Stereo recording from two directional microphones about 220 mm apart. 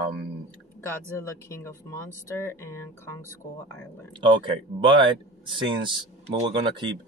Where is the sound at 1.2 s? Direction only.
15° left (ahead or behind).